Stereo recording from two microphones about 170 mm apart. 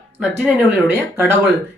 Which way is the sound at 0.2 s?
10° right (ahead or behind).